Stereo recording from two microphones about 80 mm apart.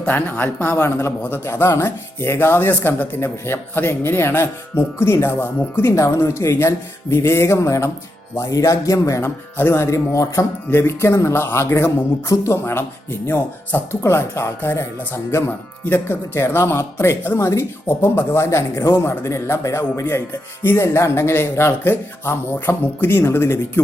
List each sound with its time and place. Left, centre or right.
0.0 s speech: left
5.9 s speech: left
9.2 s speech: left
10.7 s speech: left